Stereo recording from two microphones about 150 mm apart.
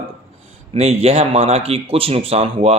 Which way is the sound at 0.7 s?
40° right (ahead or behind).